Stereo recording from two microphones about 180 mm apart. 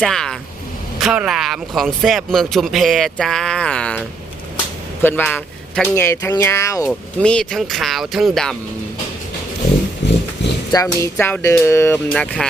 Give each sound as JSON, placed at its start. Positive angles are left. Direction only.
{"t": 0.0, "sound": "speech", "side_deg": 5}
{"t": 5.0, "sound": "a man's voice", "side_deg": 10}
{"t": 6.8, "sound": "speech", "side_deg": 5}
{"t": 10.0, "sound": "horse", "side_deg": 75}
{"t": 10.7, "sound": "speech", "side_deg": 20}